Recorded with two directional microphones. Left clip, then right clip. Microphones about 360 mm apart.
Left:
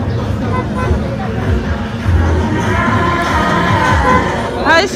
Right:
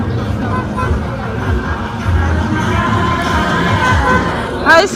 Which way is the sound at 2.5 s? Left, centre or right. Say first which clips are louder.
Left 1 dB; left.